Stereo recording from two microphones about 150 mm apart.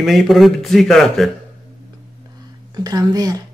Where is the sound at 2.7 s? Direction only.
25° right (ahead or behind).